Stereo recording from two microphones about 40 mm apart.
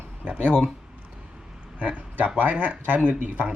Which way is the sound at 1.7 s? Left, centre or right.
Right.